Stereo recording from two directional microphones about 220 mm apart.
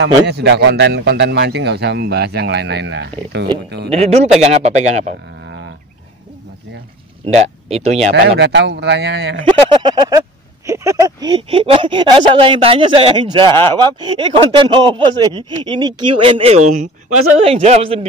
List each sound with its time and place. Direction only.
0.0 s speech: 50° right (ahead or behind)
3.9 s speech: 30° right (ahead or behind)
7.2 s speech: 30° right (ahead or behind)
8.1 s speech: 50° right (ahead or behind)
9.5 s speech: 20° right (ahead or behind)